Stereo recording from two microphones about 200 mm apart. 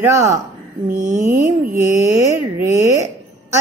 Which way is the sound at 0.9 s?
40° right (ahead or behind).